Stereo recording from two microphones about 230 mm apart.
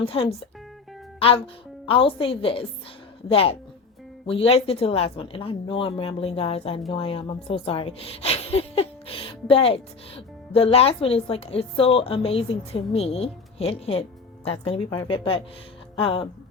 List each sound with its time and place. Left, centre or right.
0.0 s speech: left
1.9 s speech: left